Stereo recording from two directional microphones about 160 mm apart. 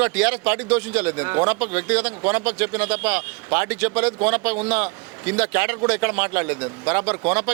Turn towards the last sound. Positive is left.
turn(degrees=-10)  # may be behind; listen again after turning